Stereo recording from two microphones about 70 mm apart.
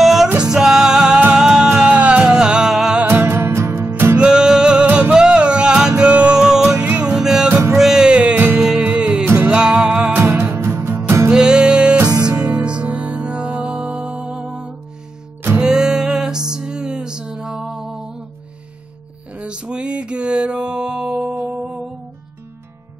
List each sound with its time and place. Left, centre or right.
0.0 s music: centre
3.1 s music: right
4.2 s music: centre
6.8 s music: right
10.1 s music: right
11.3 s music: centre
19.3 s music: centre